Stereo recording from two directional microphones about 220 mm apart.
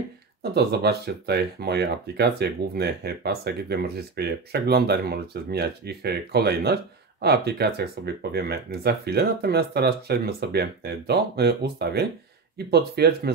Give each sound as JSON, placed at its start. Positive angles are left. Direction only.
{"t": 0.4, "sound": "speech", "side_deg": -45}